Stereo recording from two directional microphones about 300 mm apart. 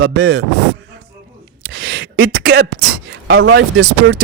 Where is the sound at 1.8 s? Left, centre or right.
Right.